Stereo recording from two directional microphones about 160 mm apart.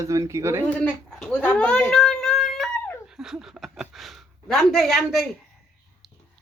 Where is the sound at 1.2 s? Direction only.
10° left (ahead or behind).